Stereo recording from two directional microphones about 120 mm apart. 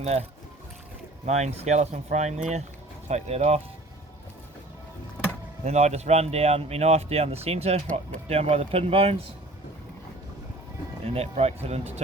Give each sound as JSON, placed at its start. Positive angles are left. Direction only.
{"t": 0.0, "sound": "speech", "side_deg": -60}
{"t": 1.2, "sound": "speech", "side_deg": -70}
{"t": 5.6, "sound": "speech", "side_deg": -65}
{"t": 11.0, "sound": "speech", "side_deg": -60}